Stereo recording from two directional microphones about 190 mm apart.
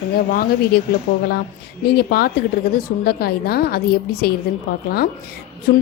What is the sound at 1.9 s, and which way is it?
A woman's voice, 55° left (ahead or behind).